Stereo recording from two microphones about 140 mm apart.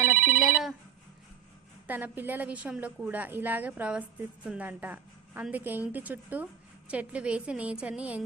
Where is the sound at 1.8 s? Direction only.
15° right (ahead or behind).